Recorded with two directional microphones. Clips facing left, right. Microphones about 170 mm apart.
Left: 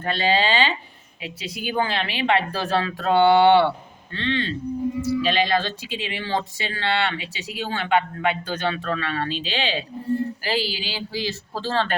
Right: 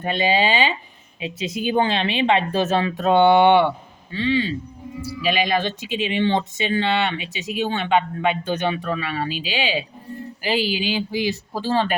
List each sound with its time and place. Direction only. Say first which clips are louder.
0.0 s speech: right 2 dB; 15° right (ahead or behind)